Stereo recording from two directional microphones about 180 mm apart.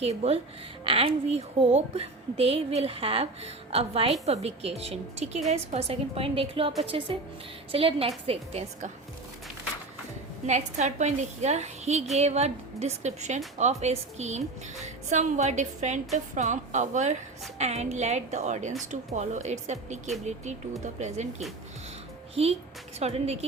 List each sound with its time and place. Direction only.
0.0 s a woman's voice: 35° right (ahead or behind)
10.4 s a woman's voice: 40° right (ahead or behind)
23.0 s a woman's voice: 35° right (ahead or behind)